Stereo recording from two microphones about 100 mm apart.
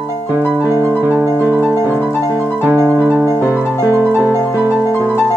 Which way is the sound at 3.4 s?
30° left (ahead or behind).